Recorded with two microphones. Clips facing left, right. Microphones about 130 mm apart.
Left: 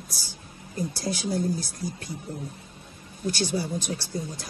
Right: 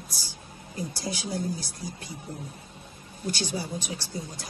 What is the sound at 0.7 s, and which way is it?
Speech, 50° left (ahead or behind).